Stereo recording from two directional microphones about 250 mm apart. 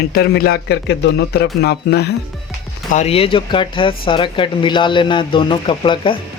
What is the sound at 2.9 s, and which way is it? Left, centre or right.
A man's voice, left.